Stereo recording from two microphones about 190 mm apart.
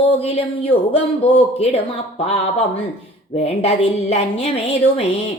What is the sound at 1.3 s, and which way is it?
Speech, 30° left (ahead or behind).